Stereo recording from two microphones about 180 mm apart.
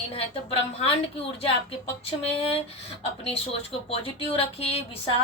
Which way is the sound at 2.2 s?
30° left (ahead or behind).